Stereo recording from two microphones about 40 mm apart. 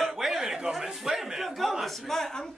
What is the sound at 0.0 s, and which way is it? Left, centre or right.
A man's voice, centre.